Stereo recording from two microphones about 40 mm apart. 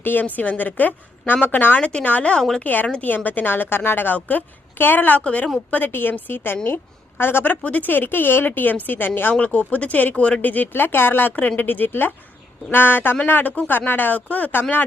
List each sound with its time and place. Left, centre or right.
0.0 s speech: left
1.8 s a woman's voice: left
2.0 s speech: left
5.1 s speech: left
5.9 s a woman's voice: left
7.6 s speech: left
7.9 s speech: left
9.4 s speech: left
10.2 s speech: left
14.2 s speech: left
14.5 s speech: left